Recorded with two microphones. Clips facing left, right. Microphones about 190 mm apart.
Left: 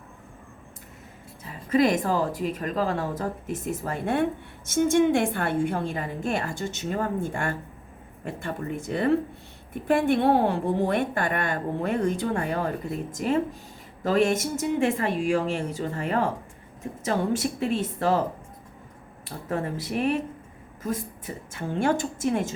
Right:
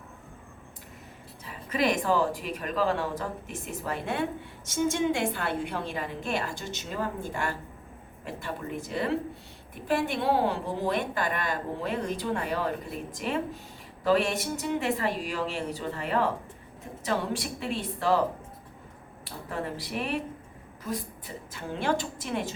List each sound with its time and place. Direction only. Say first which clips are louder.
1.5 s a woman's voice: left 6 dB; 45° left (ahead or behind)
19.5 s a woman's voice: left 5 dB; 45° left (ahead or behind)
21.5 s a woman's voice: left 4 dB; 45° left (ahead or behind)